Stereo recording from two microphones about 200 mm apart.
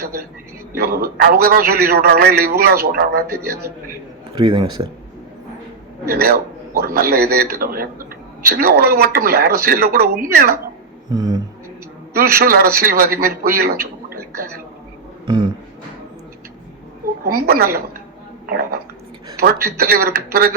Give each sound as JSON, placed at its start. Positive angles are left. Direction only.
{"t": 0.8, "sound": "a man's voice", "side_deg": -50}
{"t": 4.4, "sound": "speech", "side_deg": -20}
{"t": 6.7, "sound": "a man's voice", "side_deg": -50}
{"t": 11.1, "sound": "a sound", "side_deg": -20}
{"t": 12.1, "sound": "a man's voice", "side_deg": -50}
{"t": 15.3, "sound": "speech", "side_deg": -20}
{"t": 17.2, "sound": "a man's voice", "side_deg": -50}
{"t": 19.4, "sound": "a man's voice", "side_deg": -50}